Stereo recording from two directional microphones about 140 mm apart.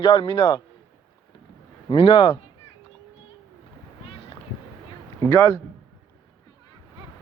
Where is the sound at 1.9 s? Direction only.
40° left (ahead or behind).